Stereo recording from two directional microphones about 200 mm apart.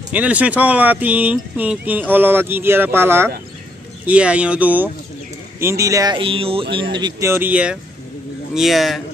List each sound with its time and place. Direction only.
0.1 s speech: 5° right (ahead or behind)